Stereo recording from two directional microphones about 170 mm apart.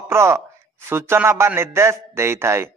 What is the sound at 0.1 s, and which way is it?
A man's voice, 15° right (ahead or behind).